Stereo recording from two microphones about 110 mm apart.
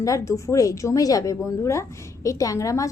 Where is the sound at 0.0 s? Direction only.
30° left (ahead or behind).